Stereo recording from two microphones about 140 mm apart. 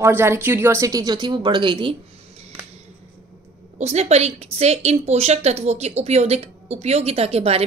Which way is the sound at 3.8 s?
50° right (ahead or behind).